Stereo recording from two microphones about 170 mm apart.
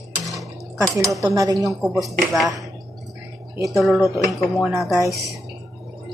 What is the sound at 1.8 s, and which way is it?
Speech, centre (ahead or behind).